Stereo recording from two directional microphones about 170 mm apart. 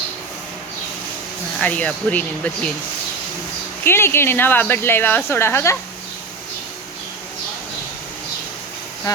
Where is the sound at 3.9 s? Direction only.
15° left (ahead or behind).